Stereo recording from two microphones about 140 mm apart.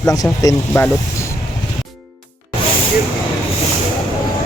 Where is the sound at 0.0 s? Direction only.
25° left (ahead or behind).